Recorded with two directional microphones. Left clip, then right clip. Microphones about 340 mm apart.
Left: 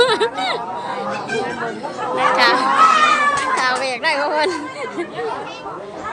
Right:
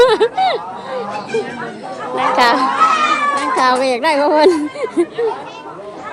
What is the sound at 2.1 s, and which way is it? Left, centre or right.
A child's voice, centre.